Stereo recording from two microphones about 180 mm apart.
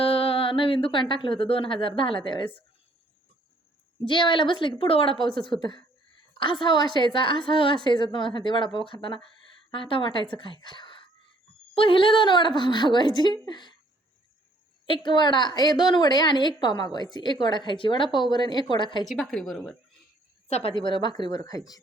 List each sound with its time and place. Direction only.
0.0 s speech: 30° left (ahead or behind)
4.0 s a woman's voice: 25° left (ahead or behind)
15.0 s a woman's voice: 25° left (ahead or behind)
19.0 s a woman's voice: centre (ahead or behind)
20.5 s a woman's voice: 30° left (ahead or behind)